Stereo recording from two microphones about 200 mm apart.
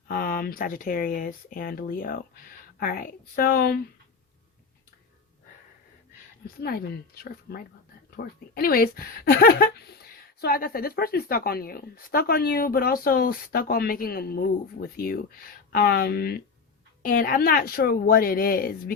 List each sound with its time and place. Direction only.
0.1 s speech: 45° left (ahead or behind)
6.6 s speech: 50° left (ahead or behind)